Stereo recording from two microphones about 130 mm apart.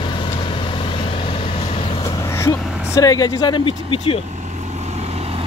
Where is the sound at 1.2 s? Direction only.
45° left (ahead or behind).